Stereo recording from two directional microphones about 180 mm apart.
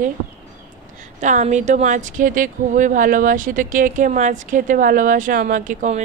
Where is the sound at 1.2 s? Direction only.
40° right (ahead or behind).